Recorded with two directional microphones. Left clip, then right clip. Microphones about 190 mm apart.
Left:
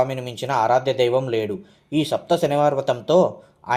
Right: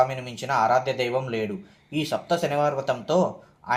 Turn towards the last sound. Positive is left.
turn(degrees=45)  # may be behind; listen again after turning